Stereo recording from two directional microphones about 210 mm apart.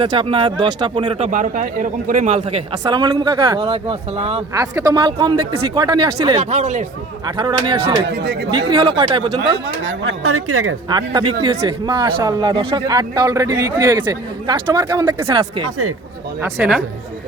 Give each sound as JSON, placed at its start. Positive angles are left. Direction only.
{"t": 0.0, "sound": "a man's voice", "side_deg": -25}
{"t": 1.3, "sound": "speech", "side_deg": -40}
{"t": 2.8, "sound": "a man's voice", "side_deg": -15}
{"t": 4.6, "sound": "a man's voice", "side_deg": -15}
{"t": 7.3, "sound": "a man's voice", "side_deg": -20}
{"t": 8.0, "sound": "speech", "side_deg": -50}
{"t": 8.4, "sound": "a man's voice", "side_deg": -20}
{"t": 9.6, "sound": "speech", "side_deg": -60}
{"t": 10.8, "sound": "a man's voice", "side_deg": -20}